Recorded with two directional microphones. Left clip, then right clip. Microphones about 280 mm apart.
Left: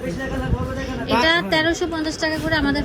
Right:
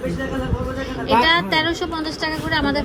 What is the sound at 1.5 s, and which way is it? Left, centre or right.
A woman's voice, left.